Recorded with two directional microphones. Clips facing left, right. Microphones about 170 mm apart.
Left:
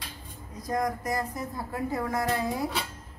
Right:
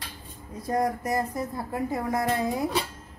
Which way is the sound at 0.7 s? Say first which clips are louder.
Right 3 dB; 30° right (ahead or behind).